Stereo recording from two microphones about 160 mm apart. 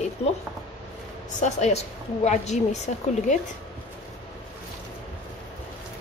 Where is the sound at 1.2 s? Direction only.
50° left (ahead or behind).